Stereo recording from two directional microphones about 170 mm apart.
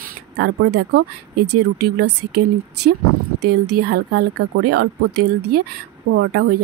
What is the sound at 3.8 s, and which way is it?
Speech, 70° right (ahead or behind).